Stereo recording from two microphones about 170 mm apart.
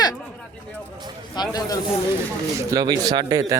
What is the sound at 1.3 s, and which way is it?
Speech, 20° left (ahead or behind).